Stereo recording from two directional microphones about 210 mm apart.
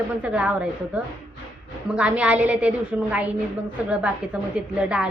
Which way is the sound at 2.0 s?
5° right (ahead or behind).